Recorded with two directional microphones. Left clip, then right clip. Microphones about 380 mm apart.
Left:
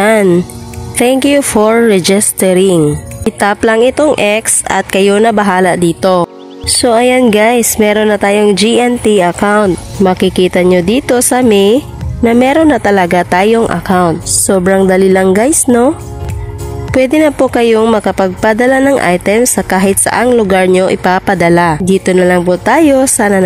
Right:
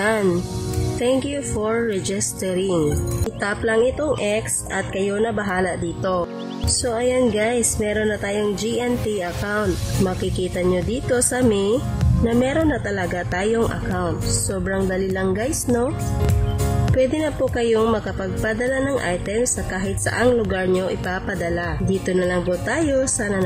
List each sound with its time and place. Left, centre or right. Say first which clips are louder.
0.0 s music: left 12 dB; centre
1.0 s speech: left 13 dB; centre
16.9 s speech: left 12 dB; centre